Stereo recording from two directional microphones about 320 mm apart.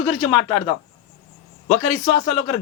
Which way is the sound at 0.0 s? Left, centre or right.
Centre.